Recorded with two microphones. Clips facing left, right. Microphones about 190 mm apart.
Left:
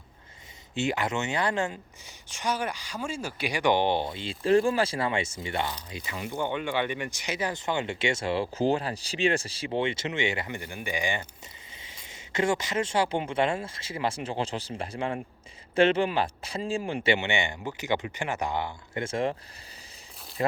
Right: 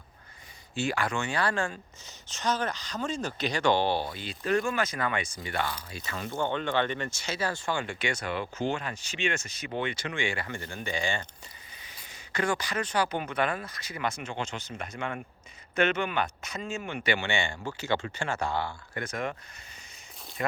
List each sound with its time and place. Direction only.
0.7 s speech: 20° left (ahead or behind)
11.8 s speech: 25° left (ahead or behind)
20.4 s speech: 25° left (ahead or behind)